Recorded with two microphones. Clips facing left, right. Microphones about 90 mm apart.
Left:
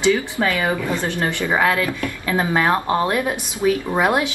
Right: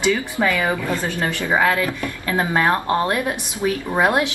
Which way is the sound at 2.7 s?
15° left (ahead or behind).